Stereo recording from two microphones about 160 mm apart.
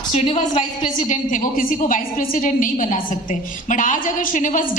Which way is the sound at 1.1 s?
55° left (ahead or behind).